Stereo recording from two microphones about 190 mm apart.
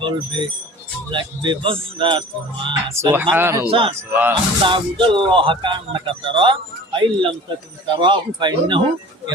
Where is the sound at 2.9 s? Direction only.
15° right (ahead or behind).